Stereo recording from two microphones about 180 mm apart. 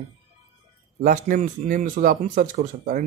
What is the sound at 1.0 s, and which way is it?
A man's voice, 45° right (ahead or behind).